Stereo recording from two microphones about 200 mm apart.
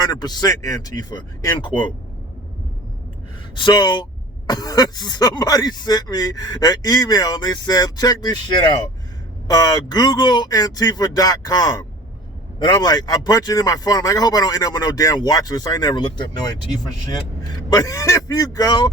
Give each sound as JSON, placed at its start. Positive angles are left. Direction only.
{"t": 0.0, "sound": "speech", "side_deg": 20}
{"t": 3.5, "sound": "speech", "side_deg": 25}
{"t": 17.4, "sound": "speech", "side_deg": 20}